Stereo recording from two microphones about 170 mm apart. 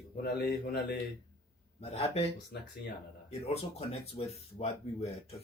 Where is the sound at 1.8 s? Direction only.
35° left (ahead or behind).